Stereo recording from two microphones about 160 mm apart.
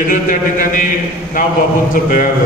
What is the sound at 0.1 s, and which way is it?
Speech, 55° left (ahead or behind).